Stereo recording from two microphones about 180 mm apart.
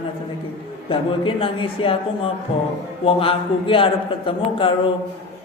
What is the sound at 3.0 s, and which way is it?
A man's voice, 30° left (ahead or behind).